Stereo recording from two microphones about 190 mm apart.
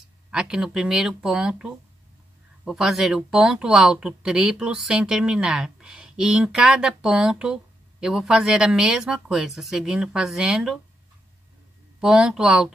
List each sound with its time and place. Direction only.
0.3 s speech: 5° right (ahead or behind)
12.0 s speech: 5° right (ahead or behind)